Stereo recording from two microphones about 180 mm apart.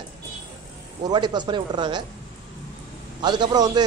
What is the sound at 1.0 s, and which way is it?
A man's voice, 25° right (ahead or behind).